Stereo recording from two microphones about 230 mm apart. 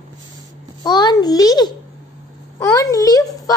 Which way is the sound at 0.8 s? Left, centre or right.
Centre.